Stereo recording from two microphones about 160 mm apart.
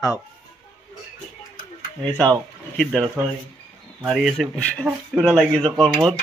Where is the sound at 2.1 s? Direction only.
5° left (ahead or behind).